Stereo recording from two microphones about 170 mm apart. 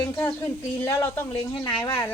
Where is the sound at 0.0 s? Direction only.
20° left (ahead or behind).